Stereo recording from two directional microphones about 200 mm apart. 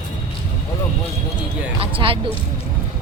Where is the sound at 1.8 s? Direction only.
25° right (ahead or behind).